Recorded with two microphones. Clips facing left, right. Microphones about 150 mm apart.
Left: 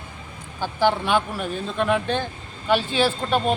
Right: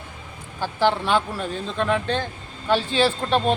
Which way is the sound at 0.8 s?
5° left (ahead or behind).